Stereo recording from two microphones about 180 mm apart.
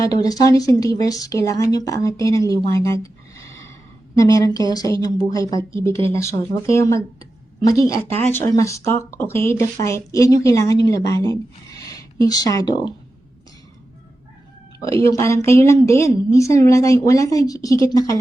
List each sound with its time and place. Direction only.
0.0 s a woman's voice: 20° left (ahead or behind)
4.1 s a woman's voice: 20° left (ahead or behind)
15.0 s a woman's voice: 15° left (ahead or behind)